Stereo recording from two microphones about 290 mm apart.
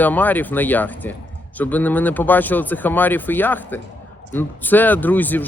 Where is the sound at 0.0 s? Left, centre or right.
Centre.